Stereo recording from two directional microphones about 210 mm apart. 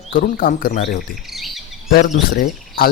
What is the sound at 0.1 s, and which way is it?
Speech, 40° left (ahead or behind).